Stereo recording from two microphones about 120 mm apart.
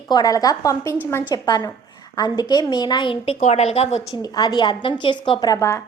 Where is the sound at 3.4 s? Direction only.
65° left (ahead or behind).